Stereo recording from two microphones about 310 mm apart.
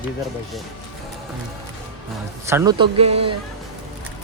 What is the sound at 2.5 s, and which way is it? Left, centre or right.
Speech, centre.